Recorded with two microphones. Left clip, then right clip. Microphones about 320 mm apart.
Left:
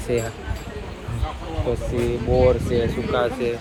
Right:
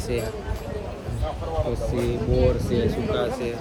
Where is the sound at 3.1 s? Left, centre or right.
Centre.